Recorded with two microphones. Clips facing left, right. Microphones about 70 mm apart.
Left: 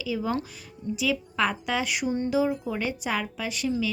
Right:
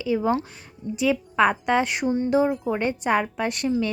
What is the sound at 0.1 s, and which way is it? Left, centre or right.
A woman's voice, right.